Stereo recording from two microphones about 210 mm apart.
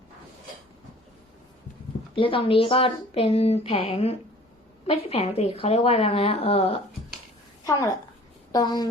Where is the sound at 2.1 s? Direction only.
25° left (ahead or behind).